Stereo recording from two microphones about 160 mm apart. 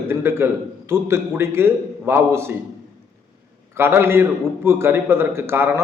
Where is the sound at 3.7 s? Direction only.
15° right (ahead or behind).